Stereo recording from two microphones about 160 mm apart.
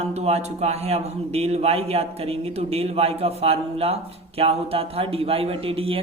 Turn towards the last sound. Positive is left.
turn(degrees=-35)  # may be behind; listen again after turning